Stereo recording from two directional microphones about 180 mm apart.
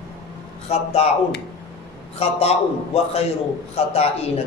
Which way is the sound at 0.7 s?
35° left (ahead or behind).